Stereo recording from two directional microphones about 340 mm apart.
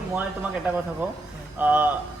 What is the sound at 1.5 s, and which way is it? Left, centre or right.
Speech, centre.